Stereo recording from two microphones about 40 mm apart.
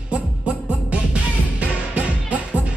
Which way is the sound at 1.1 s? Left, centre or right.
Right.